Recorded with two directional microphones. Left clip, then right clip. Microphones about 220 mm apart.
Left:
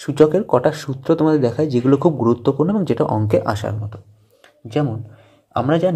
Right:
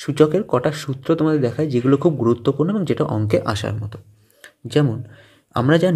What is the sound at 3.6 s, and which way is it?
Speech, 35° right (ahead or behind).